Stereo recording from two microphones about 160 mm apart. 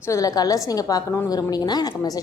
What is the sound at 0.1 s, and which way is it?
A woman's voice, 20° left (ahead or behind).